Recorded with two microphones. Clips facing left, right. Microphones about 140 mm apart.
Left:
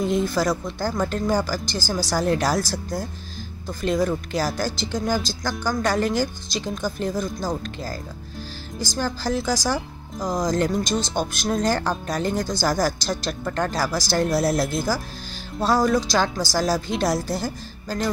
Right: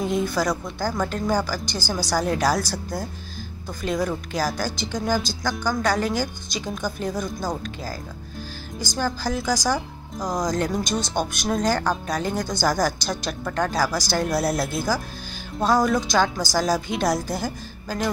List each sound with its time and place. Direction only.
0.0 s speech: centre (ahead or behind)
8.9 s speech: centre (ahead or behind)